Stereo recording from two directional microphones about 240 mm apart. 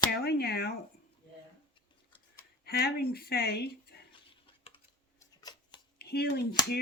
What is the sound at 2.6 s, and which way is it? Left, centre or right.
Speech, left.